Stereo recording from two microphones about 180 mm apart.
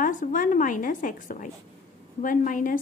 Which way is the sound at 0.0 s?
45° left (ahead or behind).